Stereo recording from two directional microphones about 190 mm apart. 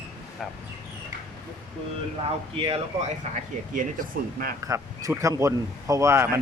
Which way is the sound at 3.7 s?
45° right (ahead or behind).